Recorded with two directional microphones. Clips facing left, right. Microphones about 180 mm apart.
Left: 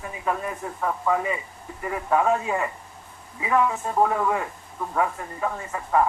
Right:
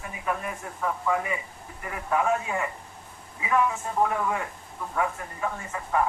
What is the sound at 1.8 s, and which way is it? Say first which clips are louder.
Speech: left 4 dB; 30° left (ahead or behind).